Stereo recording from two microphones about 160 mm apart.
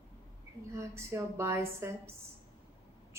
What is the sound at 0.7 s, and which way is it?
A woman's voice, 15° right (ahead or behind).